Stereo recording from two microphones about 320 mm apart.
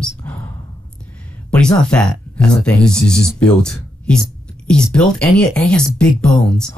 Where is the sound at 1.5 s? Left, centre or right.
Centre.